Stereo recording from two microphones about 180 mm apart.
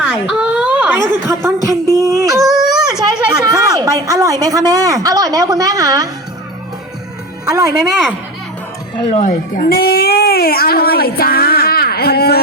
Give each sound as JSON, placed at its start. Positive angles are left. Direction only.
{"t": 0.0, "sound": "a sound", "side_deg": -5}
{"t": 2.4, "sound": "a sound", "side_deg": 0}
{"t": 3.0, "sound": "a woman's voice", "side_deg": -20}
{"t": 7.4, "sound": "speech", "side_deg": -15}
{"t": 7.7, "sound": "speech", "side_deg": -5}
{"t": 9.2, "sound": "speech", "side_deg": 55}